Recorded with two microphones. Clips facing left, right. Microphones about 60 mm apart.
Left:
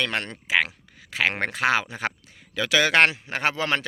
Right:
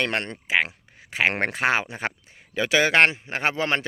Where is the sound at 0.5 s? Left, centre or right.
Centre.